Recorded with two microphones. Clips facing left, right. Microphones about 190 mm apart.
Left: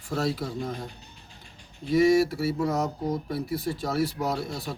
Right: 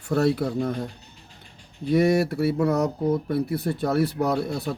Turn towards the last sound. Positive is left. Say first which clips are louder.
# right 5 dB
turn(degrees=-60)  # may be behind; listen again after turning